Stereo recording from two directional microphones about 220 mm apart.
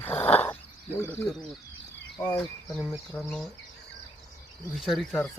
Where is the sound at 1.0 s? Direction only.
10° left (ahead or behind).